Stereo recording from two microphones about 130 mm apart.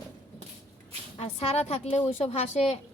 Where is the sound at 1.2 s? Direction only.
55° left (ahead or behind).